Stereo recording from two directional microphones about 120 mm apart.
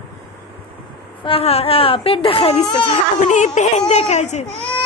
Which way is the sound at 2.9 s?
90° left.